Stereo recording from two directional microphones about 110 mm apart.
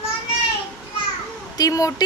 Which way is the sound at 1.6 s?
30° left (ahead or behind).